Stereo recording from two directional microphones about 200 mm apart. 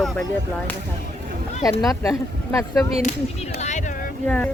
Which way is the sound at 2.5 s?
15° left (ahead or behind).